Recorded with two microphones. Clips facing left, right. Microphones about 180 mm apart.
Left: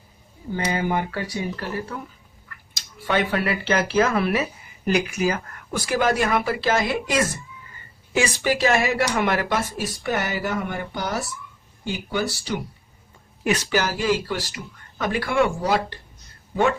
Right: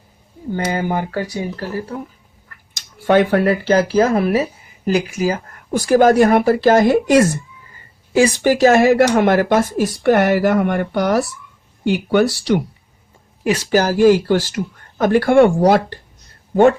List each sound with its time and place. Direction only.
0.5 s speech: 45° right (ahead or behind)
3.1 s speech: 50° right (ahead or behind)
8.4 s speech: 45° right (ahead or behind); by 12.6 s 70° right (ahead or behind)
13.4 s speech: 35° right (ahead or behind); by 16.7 s 55° right (ahead or behind)